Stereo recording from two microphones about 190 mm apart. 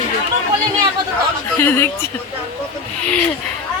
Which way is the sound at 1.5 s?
10° left (ahead or behind).